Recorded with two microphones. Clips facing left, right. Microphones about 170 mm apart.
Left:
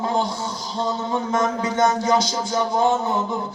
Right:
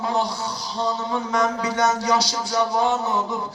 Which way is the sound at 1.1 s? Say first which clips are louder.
Left 2 dB; 25° left (ahead or behind).